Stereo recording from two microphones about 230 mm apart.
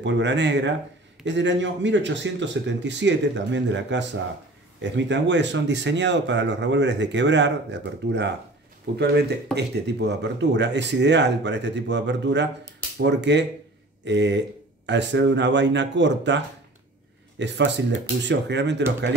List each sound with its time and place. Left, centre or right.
0.0 s speech: right